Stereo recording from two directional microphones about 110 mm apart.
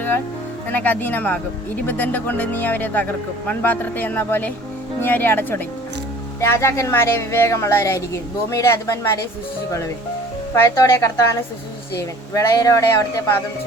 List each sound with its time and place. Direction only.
0.7 s speech: 15° left (ahead or behind)
10.5 s speech: 25° left (ahead or behind)